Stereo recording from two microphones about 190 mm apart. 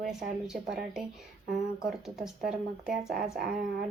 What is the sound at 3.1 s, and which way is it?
Speech, 50° right (ahead or behind).